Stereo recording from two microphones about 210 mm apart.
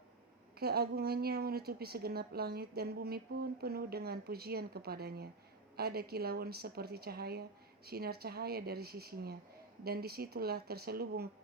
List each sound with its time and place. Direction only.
0.6 s a woman's voice: 50° right (ahead or behind)